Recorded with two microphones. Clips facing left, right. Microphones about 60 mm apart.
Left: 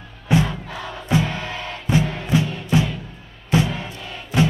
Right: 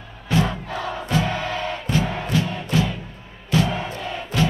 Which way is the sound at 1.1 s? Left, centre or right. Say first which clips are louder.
Left 3 dB; centre.